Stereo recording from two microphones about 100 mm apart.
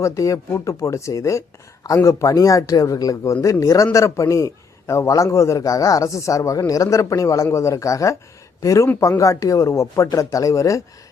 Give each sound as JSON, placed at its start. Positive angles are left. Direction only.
{"t": 0.0, "sound": "a man's voice", "side_deg": 30}